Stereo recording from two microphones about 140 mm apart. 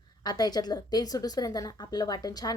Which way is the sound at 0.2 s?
30° left (ahead or behind).